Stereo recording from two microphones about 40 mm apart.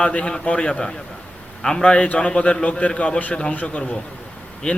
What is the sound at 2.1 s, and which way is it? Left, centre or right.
A man's voice, left.